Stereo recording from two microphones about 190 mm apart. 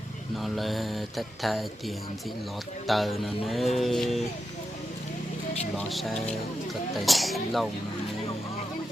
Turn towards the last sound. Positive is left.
turn(degrees=0)  # may be behind; listen again after turning